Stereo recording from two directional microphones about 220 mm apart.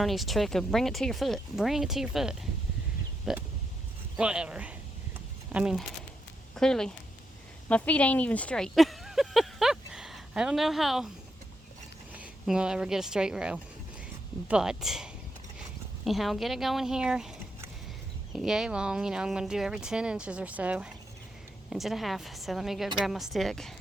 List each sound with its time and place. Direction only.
0.0 s speech: centre (ahead or behind)
12.1 s speech: 5° right (ahead or behind)